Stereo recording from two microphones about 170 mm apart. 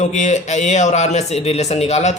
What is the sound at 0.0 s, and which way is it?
A man's voice, 45° left (ahead or behind).